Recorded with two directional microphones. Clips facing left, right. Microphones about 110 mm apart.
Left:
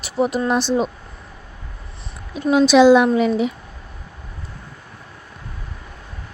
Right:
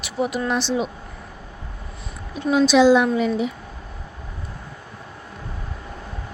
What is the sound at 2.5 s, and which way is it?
Speech, 70° left (ahead or behind).